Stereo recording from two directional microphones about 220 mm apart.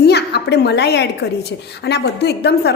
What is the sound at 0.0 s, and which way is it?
A woman's voice, 50° left (ahead or behind).